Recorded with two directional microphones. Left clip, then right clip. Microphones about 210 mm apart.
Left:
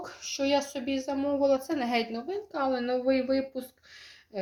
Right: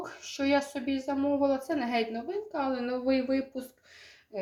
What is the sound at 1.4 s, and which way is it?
Speech, 30° left (ahead or behind).